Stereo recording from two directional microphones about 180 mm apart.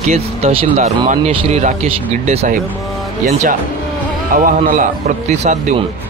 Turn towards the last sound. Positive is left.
turn(degrees=-45)  # may be behind; listen again after turning